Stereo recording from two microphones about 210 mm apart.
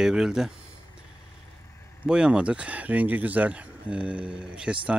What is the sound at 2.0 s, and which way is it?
A man's voice, 5° right (ahead or behind).